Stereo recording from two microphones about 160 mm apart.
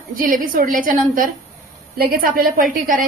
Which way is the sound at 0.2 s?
55° right (ahead or behind).